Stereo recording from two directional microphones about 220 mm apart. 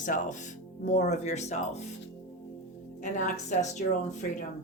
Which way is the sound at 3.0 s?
35° left (ahead or behind).